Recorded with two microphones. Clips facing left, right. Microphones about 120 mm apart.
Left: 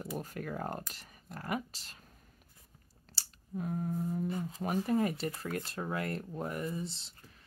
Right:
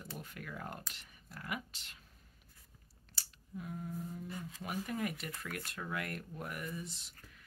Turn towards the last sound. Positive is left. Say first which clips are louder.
# left 6 dB
turn(degrees=30)  # may be behind; listen again after turning